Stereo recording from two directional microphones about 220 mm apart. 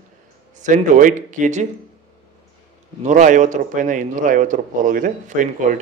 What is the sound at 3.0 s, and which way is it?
A man's voice, 35° right (ahead or behind).